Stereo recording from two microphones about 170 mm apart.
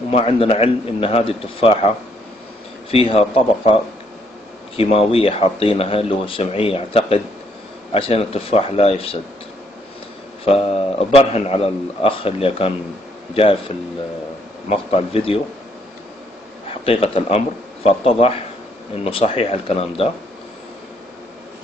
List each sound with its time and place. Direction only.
0.1 s speech: 35° left (ahead or behind)
2.9 s speech: 35° left (ahead or behind)
10.4 s speech: 35° left (ahead or behind)
16.6 s a man's voice: 35° left (ahead or behind)